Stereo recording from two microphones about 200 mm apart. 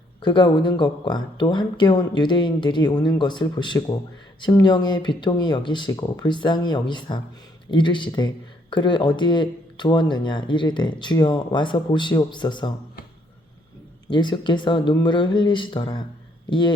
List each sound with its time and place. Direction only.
0.2 s speech: 20° left (ahead or behind)
14.1 s speech: 25° left (ahead or behind)